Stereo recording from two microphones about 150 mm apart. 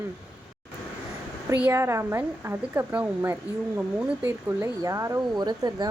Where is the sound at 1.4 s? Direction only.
15° right (ahead or behind).